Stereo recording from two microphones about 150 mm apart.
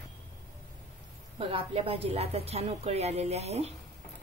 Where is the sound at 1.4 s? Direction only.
40° right (ahead or behind).